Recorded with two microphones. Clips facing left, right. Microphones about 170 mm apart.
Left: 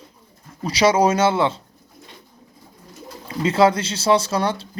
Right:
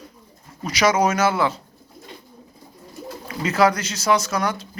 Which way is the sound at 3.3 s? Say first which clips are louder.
Left 2 dB; 25° left (ahead or behind).